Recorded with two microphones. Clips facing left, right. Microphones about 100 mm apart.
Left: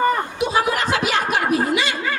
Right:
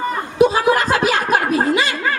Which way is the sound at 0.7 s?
40° right (ahead or behind).